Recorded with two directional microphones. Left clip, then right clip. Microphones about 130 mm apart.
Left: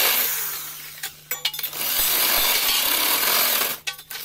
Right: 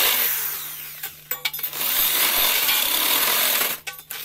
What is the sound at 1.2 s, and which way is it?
Coin, 40° right (ahead or behind).